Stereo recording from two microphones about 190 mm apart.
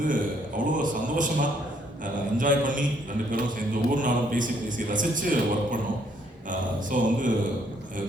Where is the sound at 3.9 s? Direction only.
45° right (ahead or behind).